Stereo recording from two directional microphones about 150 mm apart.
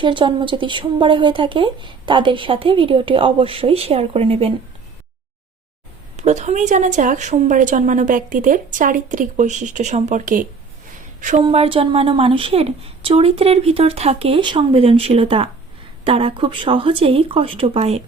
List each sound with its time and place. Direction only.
0.0 s speech: 30° right (ahead or behind)
6.1 s a woman's voice: 50° right (ahead or behind)
11.3 s speech: 40° right (ahead or behind)